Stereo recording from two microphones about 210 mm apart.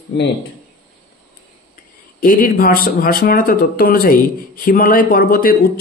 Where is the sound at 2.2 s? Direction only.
40° left (ahead or behind).